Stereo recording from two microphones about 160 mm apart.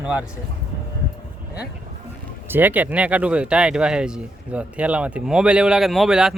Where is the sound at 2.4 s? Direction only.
10° right (ahead or behind).